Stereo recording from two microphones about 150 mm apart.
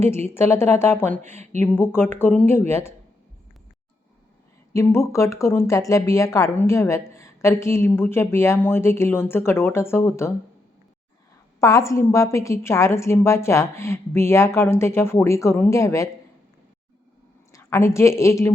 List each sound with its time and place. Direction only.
0.3 s speech: 15° left (ahead or behind)
1.2 s speech: 50° right (ahead or behind)
1.6 s speech: 15° left (ahead or behind)
4.7 s speech: 20° left (ahead or behind)
11.6 s a woman's voice: 20° left (ahead or behind)
17.5 s a woman's voice: 20° left (ahead or behind)